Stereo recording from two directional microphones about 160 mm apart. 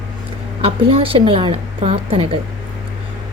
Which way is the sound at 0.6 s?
35° right (ahead or behind).